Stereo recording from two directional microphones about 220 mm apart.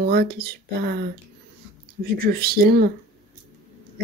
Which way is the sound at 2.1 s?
45° right (ahead or behind).